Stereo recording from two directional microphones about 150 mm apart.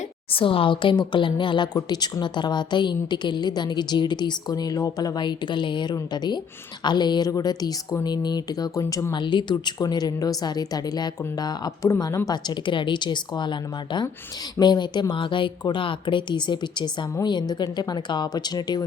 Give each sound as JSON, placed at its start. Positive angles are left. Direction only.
{"t": 0.3, "sound": "a woman's voice", "side_deg": 35}